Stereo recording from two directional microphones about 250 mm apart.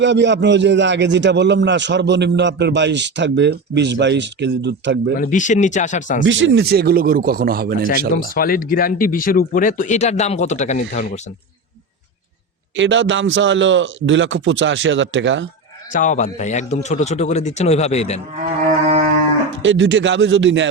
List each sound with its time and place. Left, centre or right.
0.0 s a man's voice: right
5.1 s speech: left
6.2 s speech: right
8.4 s speech: left
12.7 s a man's voice: right
15.9 s speech: left
18.7 s music: right
19.6 s a man's voice: right